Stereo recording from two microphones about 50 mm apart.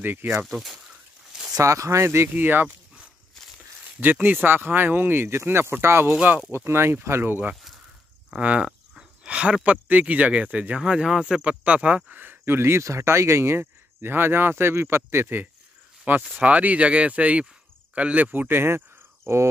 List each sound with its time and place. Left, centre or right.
0.0 s speech: right
1.6 s speech: right
2.0 s speech: right
4.0 s speech: right
8.4 s speech: right
10.8 s speech: centre
11.4 s speech: right
12.2 s speech: right
16.3 s speech: right
18.5 s speech: right